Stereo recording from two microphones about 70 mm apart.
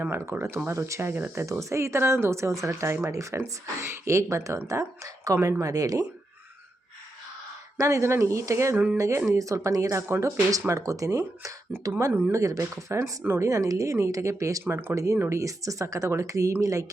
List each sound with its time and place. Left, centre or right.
0.0 s speech: right
7.8 s speech: right
13.5 s speech: right
14.6 s speech: right
14.9 s speech: right